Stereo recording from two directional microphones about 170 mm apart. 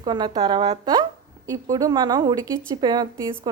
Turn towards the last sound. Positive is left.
turn(degrees=-25)  # may be behind; listen again after turning